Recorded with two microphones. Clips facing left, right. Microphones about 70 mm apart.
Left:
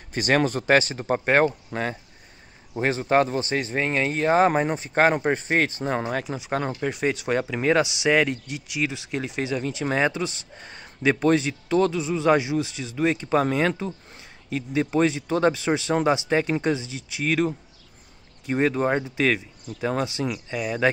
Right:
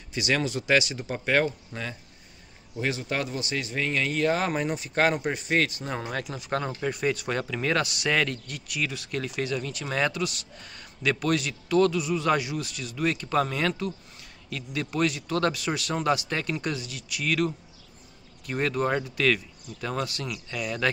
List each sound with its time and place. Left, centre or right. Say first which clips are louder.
0.1 s speech: left 5 dB; left
6.2 s speech: left 3 dB; centre